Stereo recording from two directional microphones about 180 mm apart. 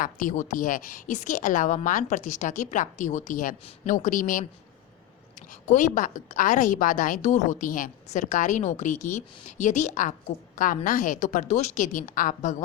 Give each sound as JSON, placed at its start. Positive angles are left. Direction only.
{"t": 0.0, "sound": "a woman's voice", "side_deg": 45}
{"t": 5.5, "sound": "a woman's voice", "side_deg": 45}